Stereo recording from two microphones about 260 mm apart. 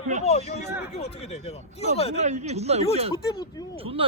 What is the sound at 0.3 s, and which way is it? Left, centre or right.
Speech, left.